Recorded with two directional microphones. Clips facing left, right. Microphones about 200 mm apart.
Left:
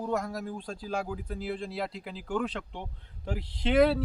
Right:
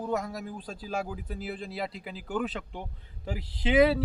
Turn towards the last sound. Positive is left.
turn(degrees=0)  # may be behind; listen again after turning